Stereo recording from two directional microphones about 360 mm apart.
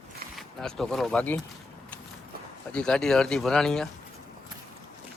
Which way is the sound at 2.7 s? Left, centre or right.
Centre.